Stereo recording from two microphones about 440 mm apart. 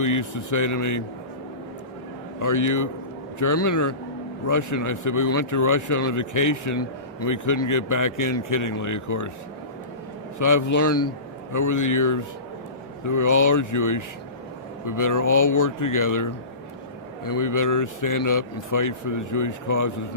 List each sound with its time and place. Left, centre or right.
0.0 s speech: left
2.4 s speech: left
10.3 s a man's voice: left